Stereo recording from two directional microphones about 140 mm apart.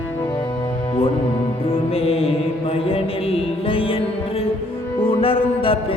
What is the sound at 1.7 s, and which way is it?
Music, 45° left (ahead or behind).